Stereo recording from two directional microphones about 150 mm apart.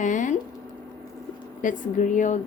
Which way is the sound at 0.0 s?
55° left (ahead or behind).